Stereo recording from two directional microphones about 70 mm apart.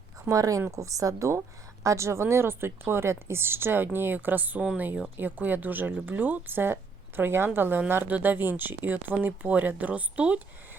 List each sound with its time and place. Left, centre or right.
0.3 s a woman's voice: right